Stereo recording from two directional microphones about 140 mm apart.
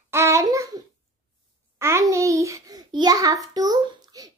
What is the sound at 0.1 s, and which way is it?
Babbling, 20° right (ahead or behind).